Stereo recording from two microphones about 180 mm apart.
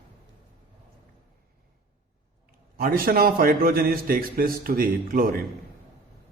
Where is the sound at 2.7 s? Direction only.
55° right (ahead or behind).